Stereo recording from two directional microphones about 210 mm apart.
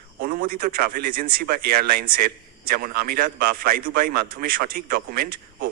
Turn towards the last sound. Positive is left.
turn(degrees=-45)  # may be behind; listen again after turning